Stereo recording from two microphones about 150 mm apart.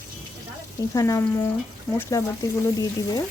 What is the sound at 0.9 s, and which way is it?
Speech, 20° left (ahead or behind).